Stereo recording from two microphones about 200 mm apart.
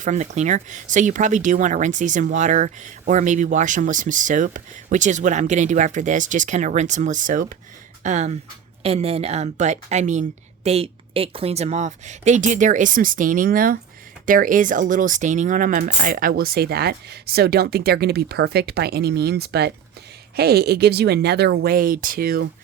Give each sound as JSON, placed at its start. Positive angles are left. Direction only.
{"t": 0.0, "sound": "speech", "side_deg": -35}